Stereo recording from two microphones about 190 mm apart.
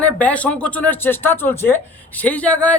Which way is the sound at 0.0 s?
5° left (ahead or behind).